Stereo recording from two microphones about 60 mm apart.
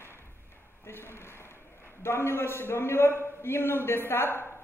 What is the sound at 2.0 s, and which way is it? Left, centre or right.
A man's voice, left.